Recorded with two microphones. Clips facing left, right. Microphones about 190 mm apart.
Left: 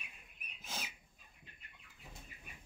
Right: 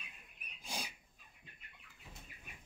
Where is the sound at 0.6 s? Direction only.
15° right (ahead or behind).